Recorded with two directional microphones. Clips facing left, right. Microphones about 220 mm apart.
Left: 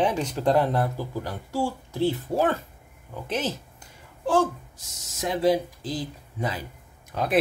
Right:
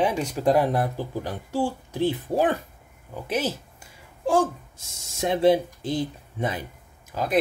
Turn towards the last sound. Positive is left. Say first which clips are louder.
# even
turn(degrees=0)  # may be behind; listen again after turning